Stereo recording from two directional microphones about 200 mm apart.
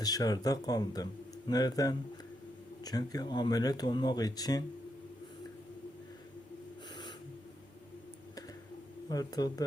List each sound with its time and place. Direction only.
0.0 s speech: 20° left (ahead or behind)
9.0 s speech: 20° left (ahead or behind)